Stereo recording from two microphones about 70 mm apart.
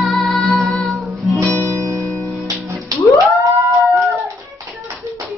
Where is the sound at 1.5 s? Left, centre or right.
Right.